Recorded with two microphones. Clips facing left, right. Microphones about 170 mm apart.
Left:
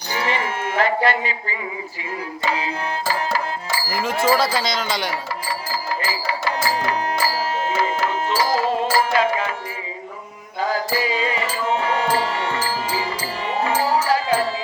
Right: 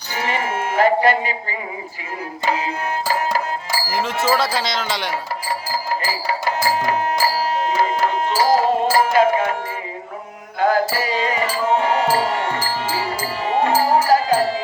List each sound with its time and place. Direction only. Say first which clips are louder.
0.1 s a sound: right 1 dB; 45° right (ahead or behind)
4.3 s speech: left 1 dB; centre (ahead or behind)
6.6 s music: right 3 dB; 40° right (ahead or behind)
10.6 s music: right 6 dB; 55° right (ahead or behind)
10.9 s music: right 1 dB; 40° right (ahead or behind)